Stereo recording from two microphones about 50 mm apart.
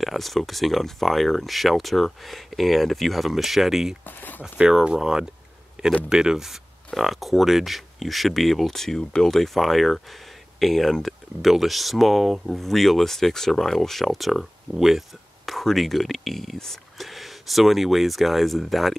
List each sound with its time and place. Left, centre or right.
0.0 s speech: centre
4.0 s a sound: left
4.4 s speech: centre